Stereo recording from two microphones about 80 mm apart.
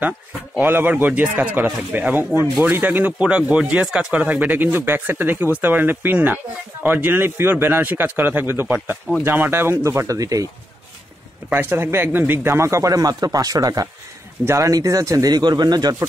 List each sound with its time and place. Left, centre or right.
0.6 s speech: right
11.5 s speech: right
14.4 s speech: right
14.7 s speech: right
15.3 s speech: right